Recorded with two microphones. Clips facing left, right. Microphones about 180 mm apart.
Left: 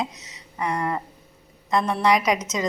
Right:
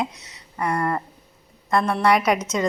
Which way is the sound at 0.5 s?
15° left (ahead or behind).